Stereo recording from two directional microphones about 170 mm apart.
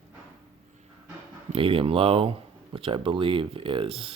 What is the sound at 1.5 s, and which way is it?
Speech, 30° right (ahead or behind).